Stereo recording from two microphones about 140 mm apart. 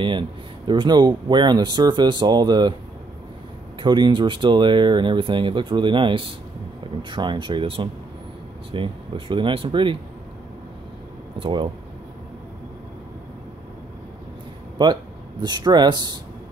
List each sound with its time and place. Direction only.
0.7 s speech: 30° right (ahead or behind)
3.8 s speech: 35° right (ahead or behind)
11.3 s speech: 35° right (ahead or behind)
14.8 s speech: 30° right (ahead or behind)